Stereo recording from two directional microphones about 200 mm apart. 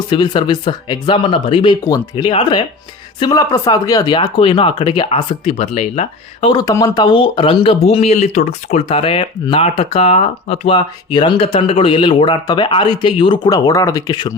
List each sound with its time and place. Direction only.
0.1 s speech: 25° left (ahead or behind)
6.5 s speech: 20° left (ahead or behind)